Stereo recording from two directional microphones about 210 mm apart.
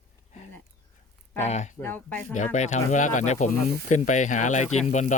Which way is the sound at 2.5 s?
35° left (ahead or behind).